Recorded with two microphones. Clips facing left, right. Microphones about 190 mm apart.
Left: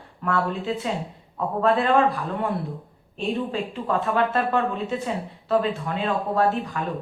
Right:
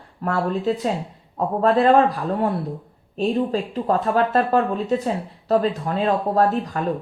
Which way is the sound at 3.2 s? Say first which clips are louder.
Right 5 dB; 40° right (ahead or behind).